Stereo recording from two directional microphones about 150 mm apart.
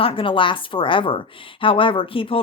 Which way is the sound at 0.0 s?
35° left (ahead or behind).